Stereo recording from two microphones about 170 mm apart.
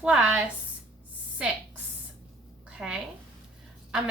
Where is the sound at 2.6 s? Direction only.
5° right (ahead or behind).